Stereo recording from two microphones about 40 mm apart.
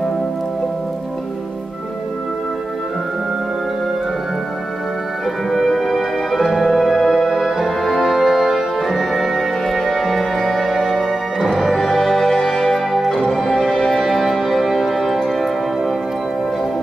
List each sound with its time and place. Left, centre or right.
5.7 s music: centre
10.7 s music: centre
12.6 s music: centre
13.1 s music: centre